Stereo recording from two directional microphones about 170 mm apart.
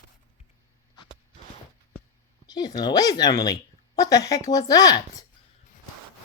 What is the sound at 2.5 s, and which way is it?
Speech, 25° left (ahead or behind).